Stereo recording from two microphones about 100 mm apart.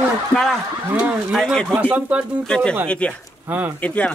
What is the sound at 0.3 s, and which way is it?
Speech, 5° left (ahead or behind).